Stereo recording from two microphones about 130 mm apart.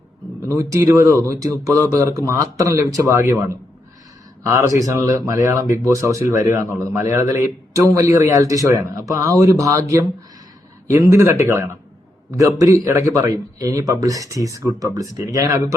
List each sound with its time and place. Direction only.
0.4 s speech: 25° right (ahead or behind)
4.8 s speech: 25° right (ahead or behind)